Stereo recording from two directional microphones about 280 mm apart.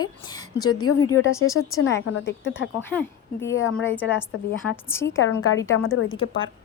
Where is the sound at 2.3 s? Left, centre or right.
Left.